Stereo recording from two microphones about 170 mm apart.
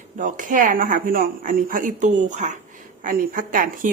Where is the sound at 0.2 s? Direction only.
50° right (ahead or behind).